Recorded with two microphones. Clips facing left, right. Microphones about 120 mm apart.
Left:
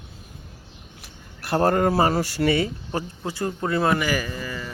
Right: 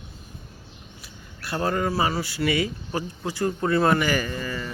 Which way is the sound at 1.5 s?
50° left (ahead or behind).